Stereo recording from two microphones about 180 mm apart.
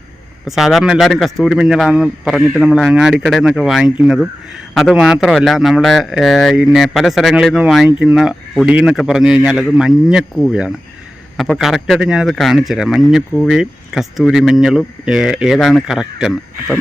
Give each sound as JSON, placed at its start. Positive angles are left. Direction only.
{"t": 0.4, "sound": "speech", "side_deg": 0}